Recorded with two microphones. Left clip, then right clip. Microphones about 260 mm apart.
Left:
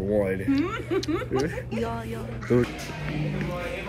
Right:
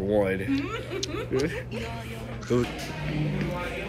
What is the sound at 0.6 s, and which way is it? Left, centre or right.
Speech, left.